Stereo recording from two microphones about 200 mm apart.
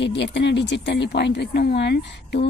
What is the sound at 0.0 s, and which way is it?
A woman's voice, 60° left (ahead or behind).